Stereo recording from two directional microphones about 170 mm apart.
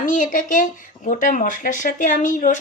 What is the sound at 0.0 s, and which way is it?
Speech, 50° left (ahead or behind).